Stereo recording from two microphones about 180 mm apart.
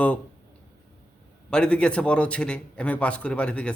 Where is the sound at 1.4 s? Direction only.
5° left (ahead or behind).